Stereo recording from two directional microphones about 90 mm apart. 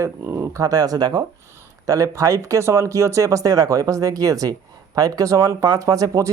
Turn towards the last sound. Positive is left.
turn(degrees=-35)  # may be behind; listen again after turning